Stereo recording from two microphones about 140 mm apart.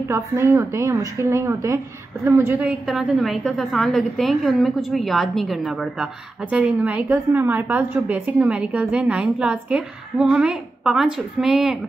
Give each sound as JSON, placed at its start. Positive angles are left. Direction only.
{"t": 0.1, "sound": "a woman's voice", "side_deg": -15}